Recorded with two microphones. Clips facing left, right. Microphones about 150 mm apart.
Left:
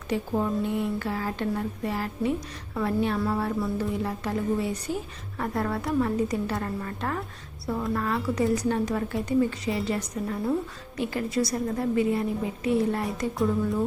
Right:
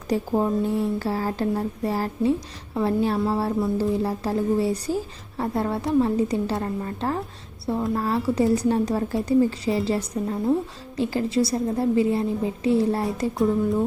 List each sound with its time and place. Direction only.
0.1 s a woman's voice: 35° right (ahead or behind)